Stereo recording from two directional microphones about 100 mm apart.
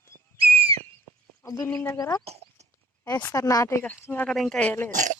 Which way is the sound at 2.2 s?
90° right.